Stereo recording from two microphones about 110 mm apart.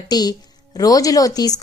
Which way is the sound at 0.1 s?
35° left (ahead or behind).